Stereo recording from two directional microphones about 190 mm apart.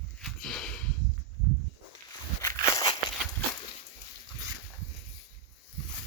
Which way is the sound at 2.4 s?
15° left (ahead or behind).